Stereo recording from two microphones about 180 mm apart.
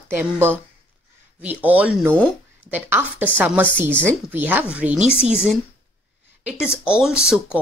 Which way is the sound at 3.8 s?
10° left (ahead or behind).